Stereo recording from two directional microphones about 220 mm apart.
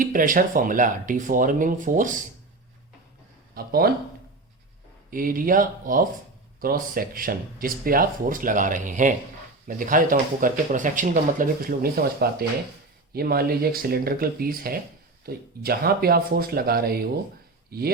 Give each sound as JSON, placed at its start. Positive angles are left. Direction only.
{"t": 0.0, "sound": "speech", "side_deg": -40}
{"t": 3.5, "sound": "speech", "side_deg": -45}
{"t": 5.1, "sound": "speech", "side_deg": -40}